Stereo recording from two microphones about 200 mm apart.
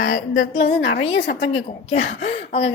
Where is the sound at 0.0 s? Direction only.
85° left.